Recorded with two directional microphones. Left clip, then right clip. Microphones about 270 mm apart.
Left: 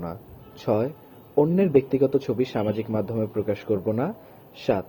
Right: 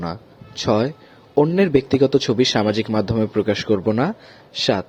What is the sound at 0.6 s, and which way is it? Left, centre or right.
Speech, right.